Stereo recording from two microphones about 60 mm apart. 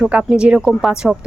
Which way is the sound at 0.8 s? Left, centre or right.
Centre.